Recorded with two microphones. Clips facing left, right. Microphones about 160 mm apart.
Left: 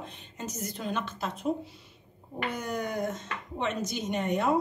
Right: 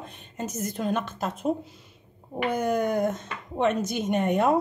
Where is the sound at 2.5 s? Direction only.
50° right (ahead or behind).